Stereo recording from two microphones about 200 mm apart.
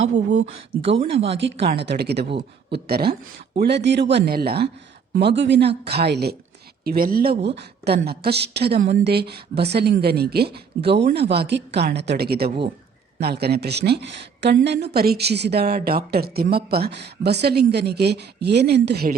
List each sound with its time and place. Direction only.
0.9 s speech: 30° right (ahead or behind)
1.6 s a woman's voice: 55° right (ahead or behind)
12.5 s speech: 25° right (ahead or behind)
13.1 s a woman's voice: 55° right (ahead or behind)